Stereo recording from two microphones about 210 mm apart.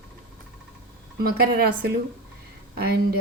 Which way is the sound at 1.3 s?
45° right (ahead or behind).